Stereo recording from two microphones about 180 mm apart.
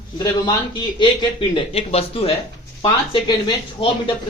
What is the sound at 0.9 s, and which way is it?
Speech, 30° left (ahead or behind).